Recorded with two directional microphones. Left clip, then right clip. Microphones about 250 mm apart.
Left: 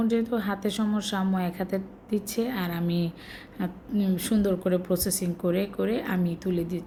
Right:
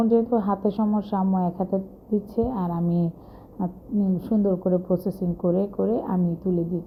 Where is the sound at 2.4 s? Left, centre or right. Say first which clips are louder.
Right 3 dB; left.